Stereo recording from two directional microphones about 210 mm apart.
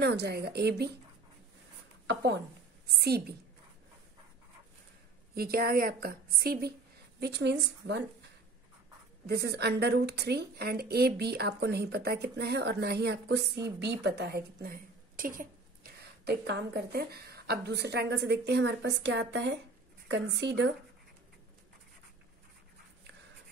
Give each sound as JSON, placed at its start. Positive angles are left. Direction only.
{"t": 0.0, "sound": "a woman's voice", "side_deg": -50}
{"t": 2.0, "sound": "a woman's voice", "side_deg": -55}
{"t": 5.3, "sound": "a woman's voice", "side_deg": -45}
{"t": 9.2, "sound": "a woman's voice", "side_deg": -50}